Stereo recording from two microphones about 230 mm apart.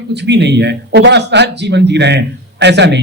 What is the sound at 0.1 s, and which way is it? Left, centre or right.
A man's voice, right.